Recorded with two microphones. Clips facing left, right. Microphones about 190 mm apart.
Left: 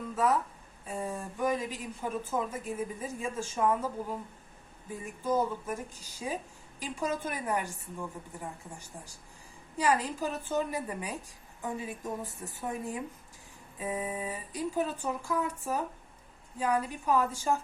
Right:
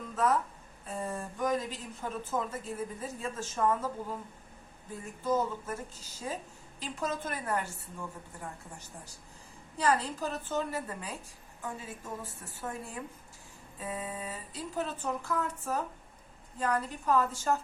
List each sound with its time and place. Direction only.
0.9 s speech: 10° left (ahead or behind)